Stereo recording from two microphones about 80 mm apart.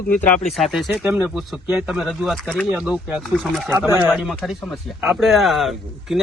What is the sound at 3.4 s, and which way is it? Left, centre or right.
Speech, centre.